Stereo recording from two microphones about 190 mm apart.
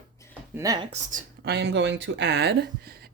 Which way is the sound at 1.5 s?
60° right (ahead or behind).